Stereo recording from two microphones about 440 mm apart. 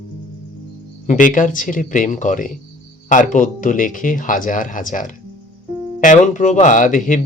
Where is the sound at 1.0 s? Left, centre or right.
Centre.